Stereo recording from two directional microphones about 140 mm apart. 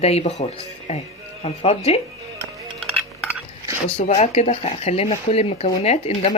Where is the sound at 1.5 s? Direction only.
50° left (ahead or behind).